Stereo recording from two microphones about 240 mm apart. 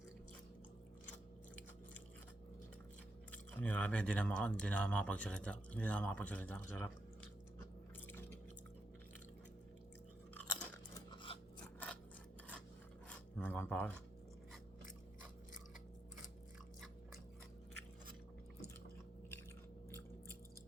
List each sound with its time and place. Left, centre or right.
3.3 s speech: centre
10.3 s chewing: centre
11.2 s filing: centre
13.1 s filing: centre